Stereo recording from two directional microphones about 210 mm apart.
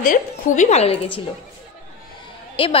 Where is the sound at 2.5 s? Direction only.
25° left (ahead or behind).